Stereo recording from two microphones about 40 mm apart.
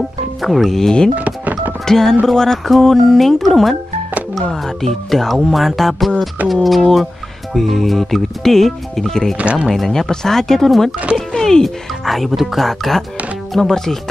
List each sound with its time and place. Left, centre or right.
0.4 s speech: centre
0.7 s speech: centre
1.1 s a sound: right
1.9 s speech: centre
9.4 s speech: right
9.8 s speech: centre